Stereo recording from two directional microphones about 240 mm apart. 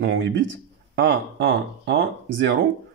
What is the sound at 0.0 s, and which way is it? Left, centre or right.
Speech, right.